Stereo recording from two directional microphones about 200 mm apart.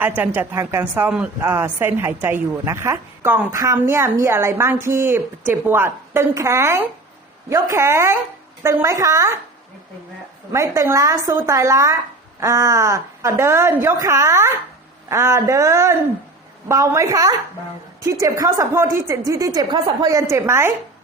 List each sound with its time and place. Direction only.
0.2 s a woman's voice: 10° right (ahead or behind)
10.5 s a woman's voice: 15° right (ahead or behind)